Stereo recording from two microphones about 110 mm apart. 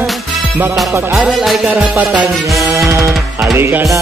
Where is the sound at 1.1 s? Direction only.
5° right (ahead or behind).